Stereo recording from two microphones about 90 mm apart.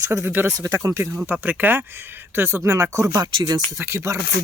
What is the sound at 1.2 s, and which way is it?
Speech, 15° right (ahead or behind).